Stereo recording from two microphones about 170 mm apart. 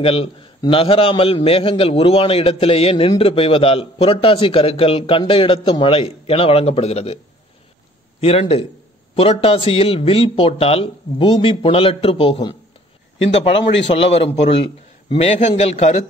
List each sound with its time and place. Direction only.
0.0 s a man's voice: 35° left (ahead or behind)
8.2 s a man's voice: 35° left (ahead or behind)